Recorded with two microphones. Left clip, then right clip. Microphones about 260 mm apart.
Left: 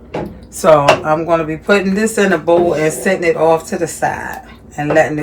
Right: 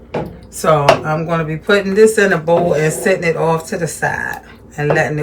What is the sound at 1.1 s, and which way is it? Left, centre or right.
Speech, centre.